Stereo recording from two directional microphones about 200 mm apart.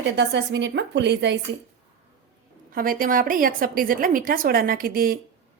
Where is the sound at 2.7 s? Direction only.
45° right (ahead or behind).